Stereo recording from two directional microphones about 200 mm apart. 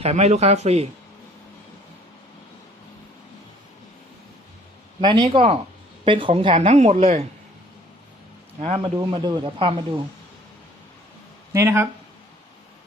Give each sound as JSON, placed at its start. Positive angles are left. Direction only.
{"t": 0.0, "sound": "a woman's voice", "side_deg": -30}
{"t": 4.9, "sound": "a woman's voice", "side_deg": -20}
{"t": 8.6, "sound": "speech", "side_deg": -25}
{"t": 11.5, "sound": "speech", "side_deg": -15}